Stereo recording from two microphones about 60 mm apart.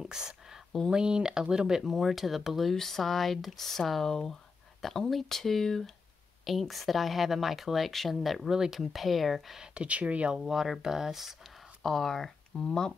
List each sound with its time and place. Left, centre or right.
0.0 s a sound: centre
0.8 s speech: centre
9.6 s speech: right
10.3 s speech: centre
11.8 s speech: centre